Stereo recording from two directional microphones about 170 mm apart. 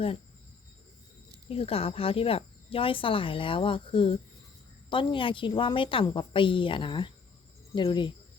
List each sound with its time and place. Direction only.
1.5 s a woman's voice: 35° left (ahead or behind)